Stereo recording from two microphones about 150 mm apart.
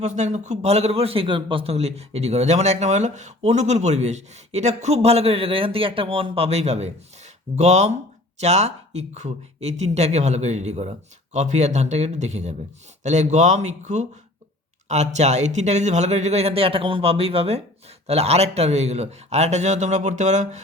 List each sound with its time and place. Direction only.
0.0 s a man's voice: 50° right (ahead or behind)